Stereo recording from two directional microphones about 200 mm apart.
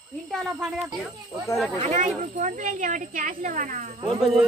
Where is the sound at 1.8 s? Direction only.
35° right (ahead or behind).